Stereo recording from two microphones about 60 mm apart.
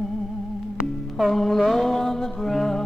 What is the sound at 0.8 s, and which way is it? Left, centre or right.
Music, centre.